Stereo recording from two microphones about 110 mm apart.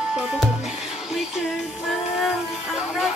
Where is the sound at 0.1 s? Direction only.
Centre (ahead or behind).